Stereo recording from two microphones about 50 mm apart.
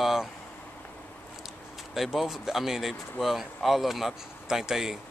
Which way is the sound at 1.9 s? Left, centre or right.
Centre.